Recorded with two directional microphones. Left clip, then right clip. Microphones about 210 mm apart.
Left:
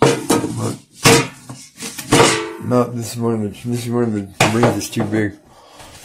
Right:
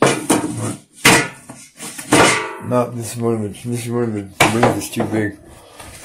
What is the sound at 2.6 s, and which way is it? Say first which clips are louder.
Speech: left 3 dB; 15° left (ahead or behind).